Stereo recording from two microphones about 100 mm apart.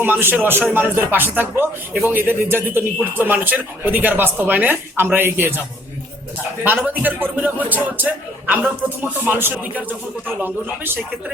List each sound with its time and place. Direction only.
0.0 s a man's voice: 20° right (ahead or behind)
6.6 s a man's voice: 15° right (ahead or behind)